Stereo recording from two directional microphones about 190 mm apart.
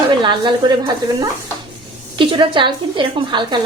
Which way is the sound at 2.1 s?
25° right (ahead or behind).